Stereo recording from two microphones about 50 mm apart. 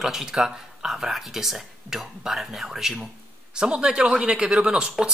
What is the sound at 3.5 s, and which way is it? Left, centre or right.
Speech, centre.